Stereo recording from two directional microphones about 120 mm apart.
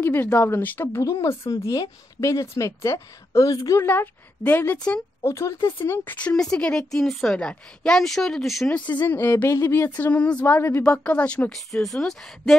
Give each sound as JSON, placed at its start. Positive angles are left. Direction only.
{"t": 0.0, "sound": "a woman's voice", "side_deg": 15}
{"t": 3.8, "sound": "speech", "side_deg": 15}
{"t": 5.2, "sound": "a woman's voice", "side_deg": 25}
{"t": 9.0, "sound": "speech", "side_deg": 15}